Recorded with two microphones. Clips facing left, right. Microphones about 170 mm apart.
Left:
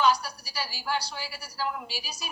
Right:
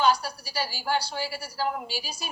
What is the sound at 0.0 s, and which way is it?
A woman's voice, 30° right (ahead or behind).